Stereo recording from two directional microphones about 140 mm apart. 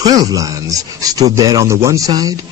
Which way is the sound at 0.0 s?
25° right (ahead or behind).